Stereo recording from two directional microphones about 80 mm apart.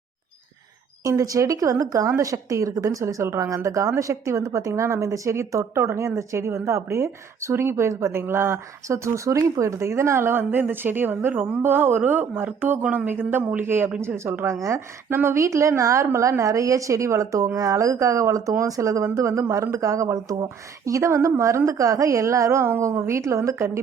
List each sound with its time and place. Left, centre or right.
1.0 s speech: right
13.4 s speech: centre
13.7 s speech: right